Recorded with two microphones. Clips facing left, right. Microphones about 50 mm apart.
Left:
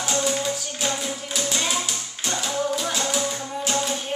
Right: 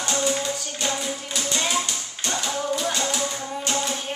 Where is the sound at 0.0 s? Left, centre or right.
Centre.